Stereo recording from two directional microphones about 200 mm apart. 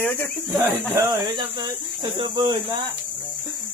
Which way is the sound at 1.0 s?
20° right (ahead or behind).